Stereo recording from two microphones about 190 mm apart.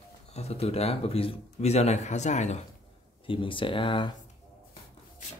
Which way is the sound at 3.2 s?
25° left (ahead or behind).